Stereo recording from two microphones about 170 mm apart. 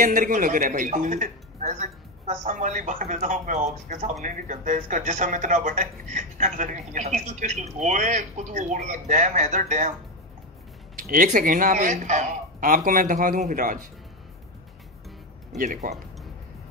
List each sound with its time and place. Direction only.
0.0 s speech: 50° right (ahead or behind)
11.0 s speech: 55° right (ahead or behind)
15.5 s speech: 55° right (ahead or behind)